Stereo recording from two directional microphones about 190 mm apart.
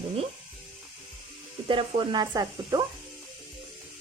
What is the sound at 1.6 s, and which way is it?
Speech, 25° right (ahead or behind).